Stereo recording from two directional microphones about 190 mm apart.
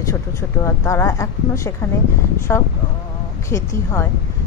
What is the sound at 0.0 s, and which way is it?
Speech, 15° left (ahead or behind).